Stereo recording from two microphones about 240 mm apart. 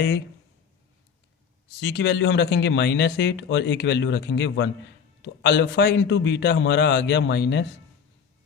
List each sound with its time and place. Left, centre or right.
1.8 s speech: left